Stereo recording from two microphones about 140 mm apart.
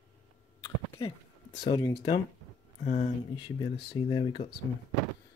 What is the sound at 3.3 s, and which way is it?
Speech, 35° left (ahead or behind).